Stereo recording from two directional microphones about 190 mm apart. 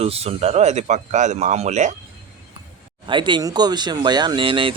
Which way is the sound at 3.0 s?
25° right (ahead or behind).